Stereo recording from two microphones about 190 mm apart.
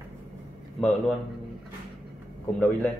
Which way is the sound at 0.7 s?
Centre (ahead or behind).